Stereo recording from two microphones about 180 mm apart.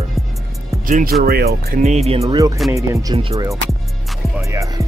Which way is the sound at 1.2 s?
60° right (ahead or behind).